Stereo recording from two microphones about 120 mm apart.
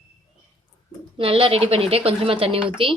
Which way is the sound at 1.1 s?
50° right (ahead or behind).